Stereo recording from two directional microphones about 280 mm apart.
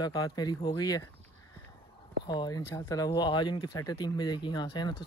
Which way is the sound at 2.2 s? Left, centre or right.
Centre.